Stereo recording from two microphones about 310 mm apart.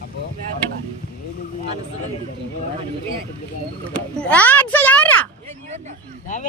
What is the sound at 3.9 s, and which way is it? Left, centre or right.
A woman's voice, centre.